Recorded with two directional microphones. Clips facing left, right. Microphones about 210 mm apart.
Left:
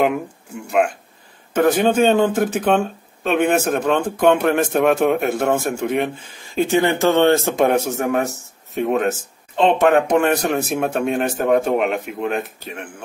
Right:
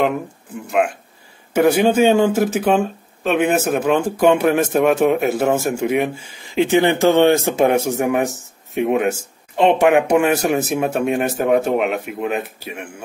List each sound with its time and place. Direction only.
0.7 s speech: centre (ahead or behind)
6.7 s speech: 20° right (ahead or behind)